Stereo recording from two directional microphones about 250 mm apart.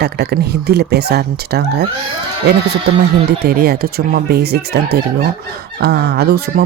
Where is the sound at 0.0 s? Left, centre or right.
Right.